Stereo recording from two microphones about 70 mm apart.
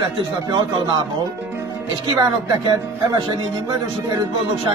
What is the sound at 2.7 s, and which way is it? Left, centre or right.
Speech, right.